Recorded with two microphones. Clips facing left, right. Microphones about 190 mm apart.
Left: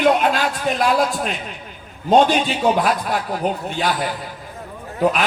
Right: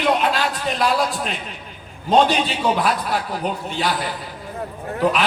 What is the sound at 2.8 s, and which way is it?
A man's voice, 45° left (ahead or behind).